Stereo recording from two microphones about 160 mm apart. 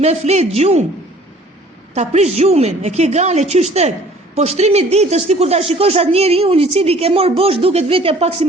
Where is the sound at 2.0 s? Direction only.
45° right (ahead or behind).